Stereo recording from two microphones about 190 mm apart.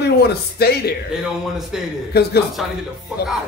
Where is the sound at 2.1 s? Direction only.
60° left (ahead or behind).